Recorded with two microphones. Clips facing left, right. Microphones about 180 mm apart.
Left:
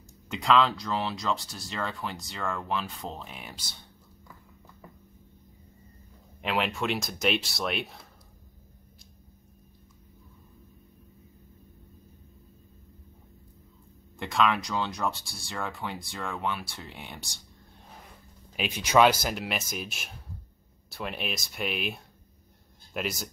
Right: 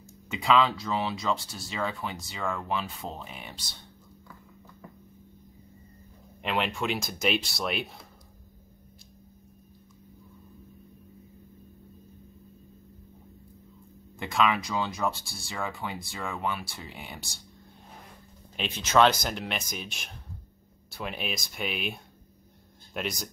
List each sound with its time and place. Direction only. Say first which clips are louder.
0.3 s speech: even; centre (ahead or behind)
6.4 s speech: even; centre (ahead or behind)
14.1 s speech: even; centre (ahead or behind)
18.6 s speech: left 1 dB; 10° left (ahead or behind)